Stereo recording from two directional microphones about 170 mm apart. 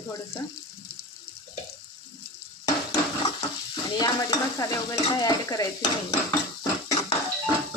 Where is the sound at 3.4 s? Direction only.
25° left (ahead or behind).